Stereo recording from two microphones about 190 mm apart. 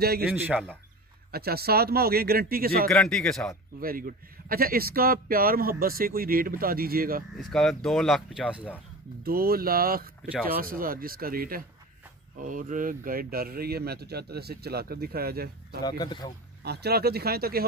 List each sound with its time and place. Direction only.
0.0 s speech: 55° right (ahead or behind)
0.5 s speech: centre (ahead or behind)
1.3 s a man's voice: 55° right (ahead or behind)
2.9 s speech: centre (ahead or behind)
3.8 s a man's voice: 50° right (ahead or behind)
7.3 s speech: centre (ahead or behind)
9.2 s a man's voice: 50° right (ahead or behind)
15.8 s speech: 20° left (ahead or behind)
16.6 s speech: 60° right (ahead or behind)